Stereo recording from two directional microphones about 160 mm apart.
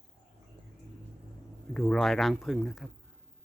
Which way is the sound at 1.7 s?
Centre (ahead or behind).